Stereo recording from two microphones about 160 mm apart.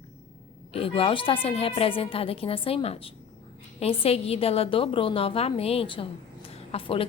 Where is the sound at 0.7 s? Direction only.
35° left (ahead or behind).